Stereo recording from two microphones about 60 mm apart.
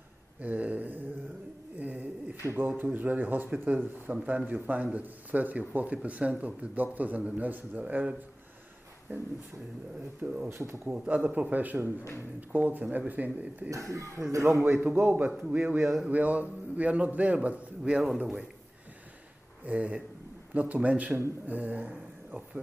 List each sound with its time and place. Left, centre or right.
0.4 s a sound: right
2.5 s speech: right
10.2 s speech: centre
10.5 s a man's voice: right
10.9 s speech: right
13.7 s speech: right
14.4 s a man's voice: right
15.0 s speech: right
15.8 s a sound: centre
16.1 s speech: right
19.6 s speech: right